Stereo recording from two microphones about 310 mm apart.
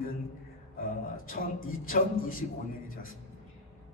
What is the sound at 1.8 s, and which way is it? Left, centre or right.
Speech, left.